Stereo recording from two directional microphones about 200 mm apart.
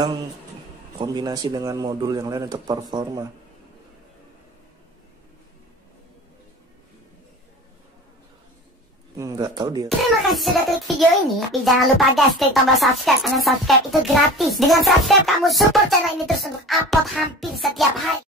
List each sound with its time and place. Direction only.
0.9 s a man's voice: 20° right (ahead or behind)
9.1 s speech: 15° right (ahead or behind)
9.8 s speech: centre (ahead or behind)